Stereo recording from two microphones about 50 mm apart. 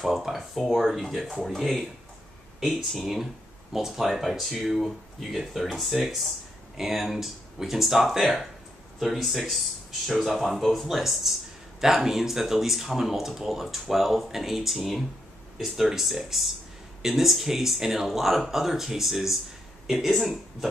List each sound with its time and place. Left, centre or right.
0.0 s speech: centre
3.7 s speech: centre